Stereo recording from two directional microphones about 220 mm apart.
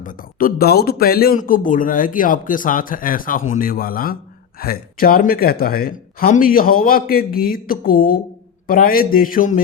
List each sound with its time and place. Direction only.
0.0 s a man's voice: 40° left (ahead or behind)